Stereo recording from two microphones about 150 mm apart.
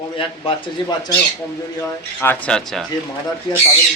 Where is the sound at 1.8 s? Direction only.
10° left (ahead or behind).